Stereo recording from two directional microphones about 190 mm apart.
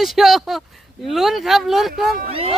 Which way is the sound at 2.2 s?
30° right (ahead or behind).